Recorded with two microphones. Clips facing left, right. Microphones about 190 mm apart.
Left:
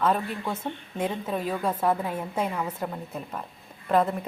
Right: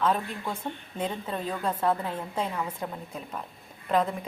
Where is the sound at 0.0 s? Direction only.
5° left (ahead or behind).